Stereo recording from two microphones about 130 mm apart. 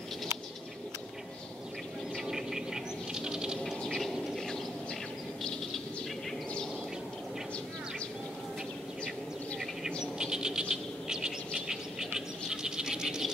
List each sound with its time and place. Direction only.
2.2 s bird: 5° right (ahead or behind)
10.1 s bird: 5° right (ahead or behind)